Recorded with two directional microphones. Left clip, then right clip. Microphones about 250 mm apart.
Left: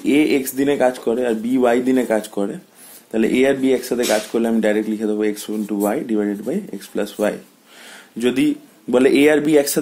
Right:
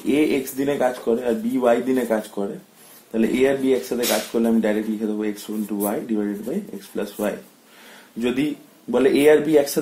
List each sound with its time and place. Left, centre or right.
0.0 s speech: left